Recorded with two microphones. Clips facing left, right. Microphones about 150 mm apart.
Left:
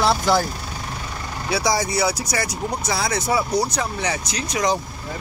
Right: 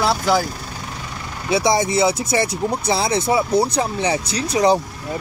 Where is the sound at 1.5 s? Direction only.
25° right (ahead or behind).